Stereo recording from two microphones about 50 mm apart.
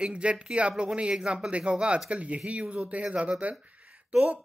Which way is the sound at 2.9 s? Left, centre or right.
Right.